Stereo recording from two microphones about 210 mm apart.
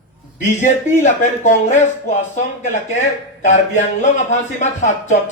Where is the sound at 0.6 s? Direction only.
35° left (ahead or behind).